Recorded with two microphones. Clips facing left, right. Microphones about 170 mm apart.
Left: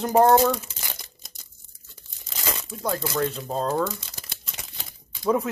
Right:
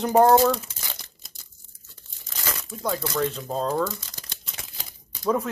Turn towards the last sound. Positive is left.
turn(degrees=0)  # may be behind; listen again after turning